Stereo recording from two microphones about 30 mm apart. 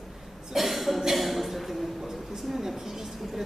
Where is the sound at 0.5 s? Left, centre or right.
Centre.